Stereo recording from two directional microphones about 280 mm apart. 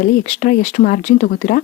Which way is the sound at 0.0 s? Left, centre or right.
Left.